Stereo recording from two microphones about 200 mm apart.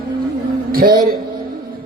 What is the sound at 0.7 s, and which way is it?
Speech, 50° right (ahead or behind).